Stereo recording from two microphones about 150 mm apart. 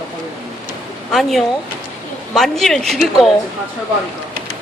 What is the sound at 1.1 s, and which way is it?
A woman's voice, centre (ahead or behind).